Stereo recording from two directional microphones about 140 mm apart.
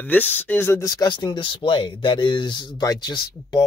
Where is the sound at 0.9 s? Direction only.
30° left (ahead or behind).